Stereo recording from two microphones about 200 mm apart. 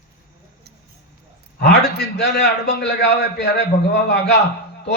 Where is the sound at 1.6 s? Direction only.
55° left (ahead or behind).